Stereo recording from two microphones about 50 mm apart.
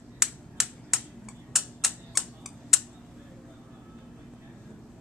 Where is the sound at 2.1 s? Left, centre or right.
Centre.